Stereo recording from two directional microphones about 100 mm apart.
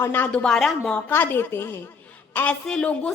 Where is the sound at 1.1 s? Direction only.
20° left (ahead or behind).